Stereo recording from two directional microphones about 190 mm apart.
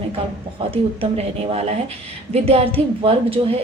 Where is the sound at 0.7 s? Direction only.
30° right (ahead or behind).